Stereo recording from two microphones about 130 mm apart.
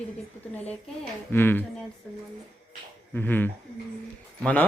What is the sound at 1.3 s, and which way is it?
Speech, 15° left (ahead or behind).